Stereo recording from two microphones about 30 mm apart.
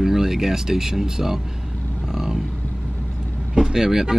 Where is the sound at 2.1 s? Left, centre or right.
Centre.